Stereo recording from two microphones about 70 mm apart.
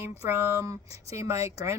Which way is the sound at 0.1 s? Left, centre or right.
Right.